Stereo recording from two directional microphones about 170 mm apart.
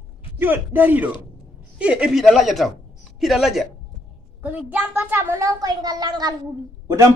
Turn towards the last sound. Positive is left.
turn(degrees=-20)  # may be behind; listen again after turning